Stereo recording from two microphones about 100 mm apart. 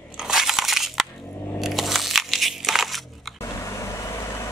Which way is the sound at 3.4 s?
30° left (ahead or behind).